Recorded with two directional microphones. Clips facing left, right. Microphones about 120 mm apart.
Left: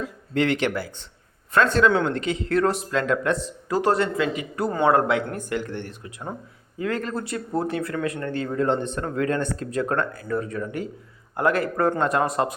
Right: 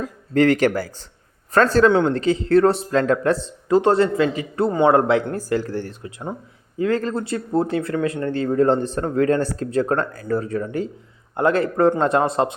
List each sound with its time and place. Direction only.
0.0 s speech: 40° right (ahead or behind)